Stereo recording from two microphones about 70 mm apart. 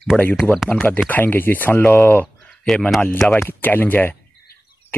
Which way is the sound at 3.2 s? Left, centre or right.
Centre.